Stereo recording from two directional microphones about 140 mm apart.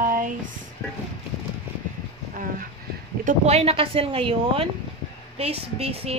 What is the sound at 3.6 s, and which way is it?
A woman's voice, 45° right (ahead or behind).